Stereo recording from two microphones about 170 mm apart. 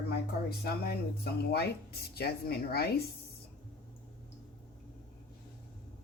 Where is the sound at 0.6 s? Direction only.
65° left (ahead or behind).